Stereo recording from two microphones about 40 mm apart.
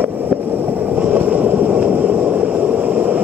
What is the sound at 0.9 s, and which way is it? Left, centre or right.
Vehicle, right.